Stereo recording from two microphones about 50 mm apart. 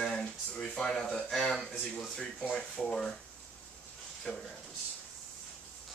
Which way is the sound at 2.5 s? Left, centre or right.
Left.